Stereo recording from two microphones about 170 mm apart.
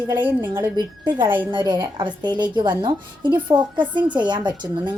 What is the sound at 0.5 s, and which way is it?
Speech, 25° right (ahead or behind).